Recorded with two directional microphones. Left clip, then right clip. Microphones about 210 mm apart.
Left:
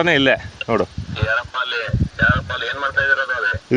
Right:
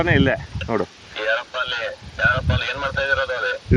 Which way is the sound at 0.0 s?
60° left (ahead or behind).